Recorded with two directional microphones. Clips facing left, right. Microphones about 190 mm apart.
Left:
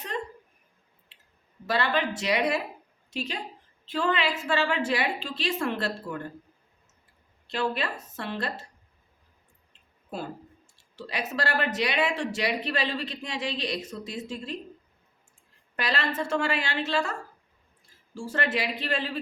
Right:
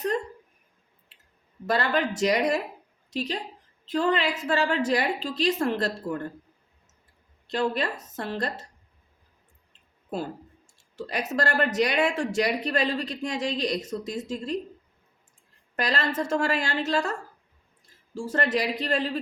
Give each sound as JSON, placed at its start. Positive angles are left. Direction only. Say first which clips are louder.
{"t": 1.6, "sound": "a woman's voice", "louder": "right 2 dB", "side_deg": -45}
{"t": 7.4, "sound": "a woman's voice", "louder": "right 3 dB", "side_deg": -40}
{"t": 10.9, "sound": "speech", "louder": "right 4 dB", "side_deg": -45}
{"t": 15.7, "sound": "a woman's voice", "louder": "right 2 dB", "side_deg": -40}